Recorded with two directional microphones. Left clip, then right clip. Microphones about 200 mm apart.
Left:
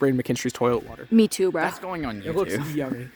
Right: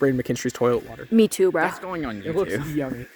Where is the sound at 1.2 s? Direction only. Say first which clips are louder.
Right 3 dB; centre (ahead or behind).